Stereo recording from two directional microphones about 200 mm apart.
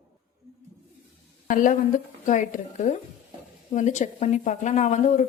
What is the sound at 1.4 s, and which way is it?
Speech, 40° left (ahead or behind).